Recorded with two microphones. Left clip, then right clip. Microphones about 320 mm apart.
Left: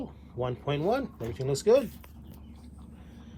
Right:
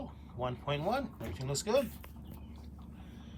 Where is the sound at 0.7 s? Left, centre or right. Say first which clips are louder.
Left 6 dB; centre.